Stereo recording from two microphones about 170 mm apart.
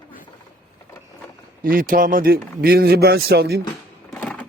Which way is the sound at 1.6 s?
55° right (ahead or behind).